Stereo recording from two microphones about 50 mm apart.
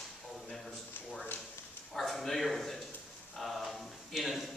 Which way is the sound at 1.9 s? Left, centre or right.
Centre.